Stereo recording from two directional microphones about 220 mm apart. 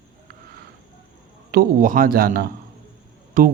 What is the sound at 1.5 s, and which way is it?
A man's voice, 40° right (ahead or behind).